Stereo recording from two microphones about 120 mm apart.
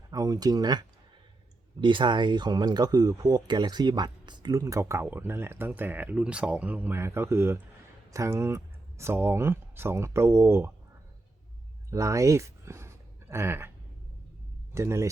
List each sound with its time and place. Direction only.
0.1 s speech: 30° right (ahead or behind)
11.9 s speech: 25° right (ahead or behind)
14.7 s speech: 20° right (ahead or behind)